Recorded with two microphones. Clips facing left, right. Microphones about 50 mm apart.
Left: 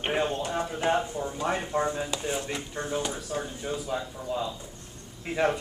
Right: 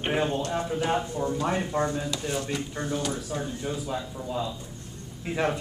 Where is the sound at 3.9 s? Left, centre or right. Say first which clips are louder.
Left 1 dB; centre.